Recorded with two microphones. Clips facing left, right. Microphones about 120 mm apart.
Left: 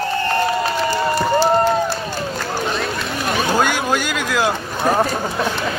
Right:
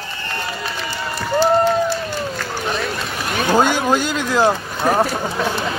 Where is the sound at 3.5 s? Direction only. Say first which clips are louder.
Right 6 dB; 25° right (ahead or behind).